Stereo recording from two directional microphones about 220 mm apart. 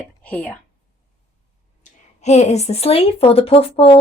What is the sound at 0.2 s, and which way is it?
Speech, 5° left (ahead or behind).